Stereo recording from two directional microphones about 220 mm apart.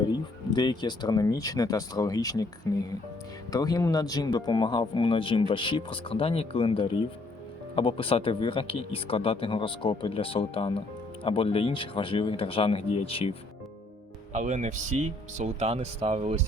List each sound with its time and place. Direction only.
0.1 s speech: 20° left (ahead or behind)
3.5 s speech: 15° left (ahead or behind)
14.3 s speech: 35° right (ahead or behind)